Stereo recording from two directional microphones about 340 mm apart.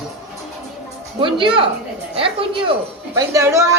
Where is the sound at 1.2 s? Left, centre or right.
Centre.